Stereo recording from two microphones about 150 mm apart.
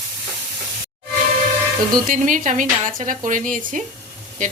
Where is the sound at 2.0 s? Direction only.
60° right (ahead or behind).